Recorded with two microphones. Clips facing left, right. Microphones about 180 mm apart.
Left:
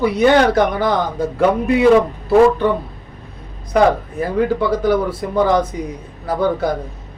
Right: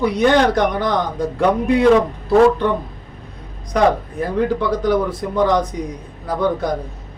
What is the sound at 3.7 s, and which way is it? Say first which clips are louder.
Speech: left 2 dB; 5° left (ahead or behind).